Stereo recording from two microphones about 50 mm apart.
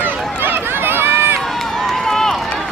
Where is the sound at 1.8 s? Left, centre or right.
Centre.